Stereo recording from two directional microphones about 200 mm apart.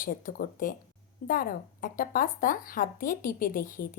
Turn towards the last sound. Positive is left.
turn(degrees=45)  # may be behind; listen again after turning